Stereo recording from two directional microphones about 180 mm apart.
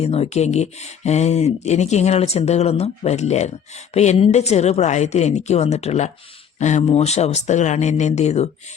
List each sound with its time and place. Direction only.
0.0 s speech: 35° left (ahead or behind)